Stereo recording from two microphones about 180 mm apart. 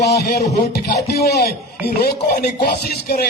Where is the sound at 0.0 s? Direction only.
60° left (ahead or behind).